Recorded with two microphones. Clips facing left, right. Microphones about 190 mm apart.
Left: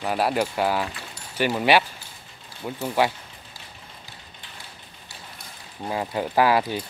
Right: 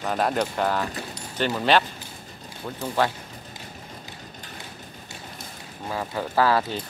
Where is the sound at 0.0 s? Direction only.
5° left (ahead or behind).